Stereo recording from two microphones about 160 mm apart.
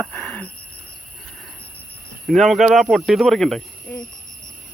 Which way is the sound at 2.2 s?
Centre (ahead or behind).